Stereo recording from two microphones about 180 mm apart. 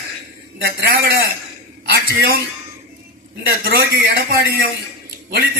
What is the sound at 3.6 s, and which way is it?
Speech, 55° right (ahead or behind).